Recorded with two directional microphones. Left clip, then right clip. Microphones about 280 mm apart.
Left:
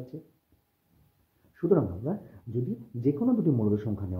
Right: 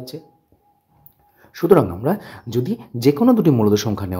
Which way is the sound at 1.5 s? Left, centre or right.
Right.